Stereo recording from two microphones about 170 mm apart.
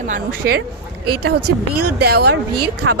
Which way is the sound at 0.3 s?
65° right (ahead or behind).